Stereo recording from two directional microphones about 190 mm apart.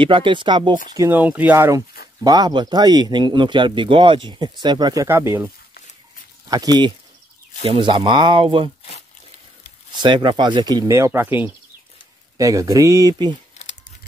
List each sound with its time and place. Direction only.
0.0 s speech: 25° right (ahead or behind)
0.9 s speech: 10° right (ahead or behind)
6.5 s speech: 20° right (ahead or behind)
9.9 s speech: 25° right (ahead or behind)